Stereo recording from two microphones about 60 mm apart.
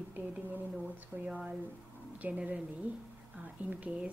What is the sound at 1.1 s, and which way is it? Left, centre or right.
Speech, right.